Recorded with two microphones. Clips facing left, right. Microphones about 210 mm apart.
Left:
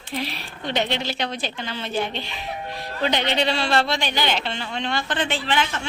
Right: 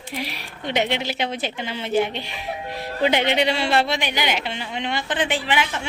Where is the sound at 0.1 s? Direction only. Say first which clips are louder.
Left 2 dB; 10° right (ahead or behind).